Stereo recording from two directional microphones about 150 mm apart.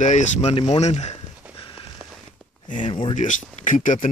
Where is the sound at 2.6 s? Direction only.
60° left (ahead or behind).